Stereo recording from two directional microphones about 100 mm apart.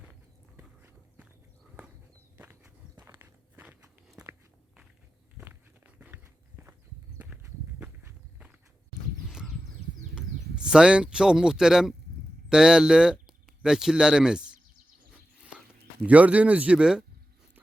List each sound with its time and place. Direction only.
2.4 s walk: 20° right (ahead or behind)
7.8 s walk: 15° right (ahead or behind)
9.3 s a sound: 5° right (ahead or behind)
10.2 s speech: 10° right (ahead or behind)
16.0 s speech: 15° right (ahead or behind)